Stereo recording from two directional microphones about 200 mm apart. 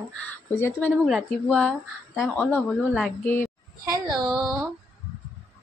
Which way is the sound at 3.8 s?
20° right (ahead or behind).